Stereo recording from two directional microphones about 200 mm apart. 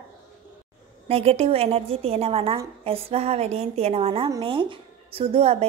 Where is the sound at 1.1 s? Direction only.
30° right (ahead or behind).